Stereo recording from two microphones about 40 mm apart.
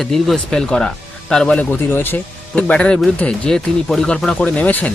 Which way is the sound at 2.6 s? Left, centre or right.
Left.